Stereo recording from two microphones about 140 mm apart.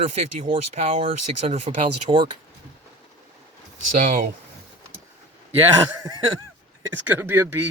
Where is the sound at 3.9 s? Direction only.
75° right (ahead or behind).